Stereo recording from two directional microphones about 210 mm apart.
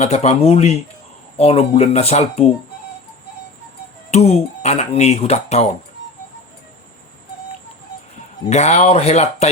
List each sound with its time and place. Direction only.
0.0 s speech: 30° left (ahead or behind)
4.1 s speech: 30° left (ahead or behind)
8.4 s speech: 30° left (ahead or behind)